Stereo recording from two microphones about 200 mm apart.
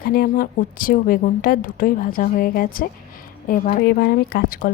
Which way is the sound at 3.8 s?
55° left (ahead or behind).